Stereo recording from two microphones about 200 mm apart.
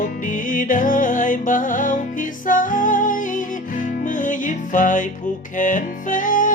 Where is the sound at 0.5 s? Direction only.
40° left (ahead or behind).